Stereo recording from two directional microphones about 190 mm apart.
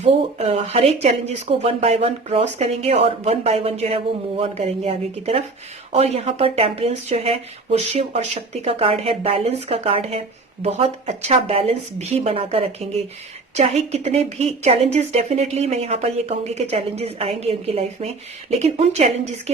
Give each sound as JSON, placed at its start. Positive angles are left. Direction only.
{"t": 0.0, "sound": "speech", "side_deg": -30}